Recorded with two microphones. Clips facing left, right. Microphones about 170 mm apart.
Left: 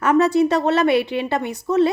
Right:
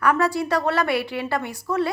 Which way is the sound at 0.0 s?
20° left (ahead or behind).